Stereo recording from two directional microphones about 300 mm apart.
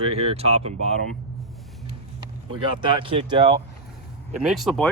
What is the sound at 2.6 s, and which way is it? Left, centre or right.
Speech, centre.